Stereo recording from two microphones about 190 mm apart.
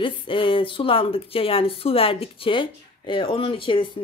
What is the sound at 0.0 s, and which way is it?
Speech, 25° left (ahead or behind).